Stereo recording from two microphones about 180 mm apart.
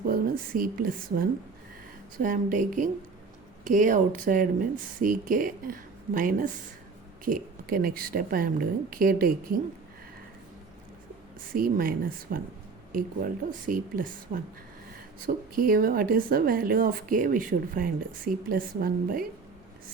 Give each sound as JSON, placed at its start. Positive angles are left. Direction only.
{"t": 0.1, "sound": "a woman's voice", "side_deg": -55}
{"t": 11.5, "sound": "speech", "side_deg": -55}
{"t": 15.5, "sound": "speech", "side_deg": -50}